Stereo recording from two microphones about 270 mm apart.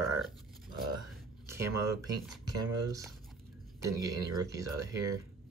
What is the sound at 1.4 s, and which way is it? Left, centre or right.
Speech, centre.